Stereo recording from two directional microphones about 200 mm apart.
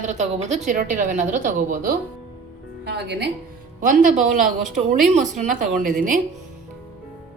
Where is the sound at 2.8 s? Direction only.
55° right (ahead or behind).